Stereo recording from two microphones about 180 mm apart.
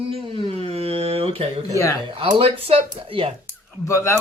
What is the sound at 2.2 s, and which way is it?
Speech, 30° right (ahead or behind).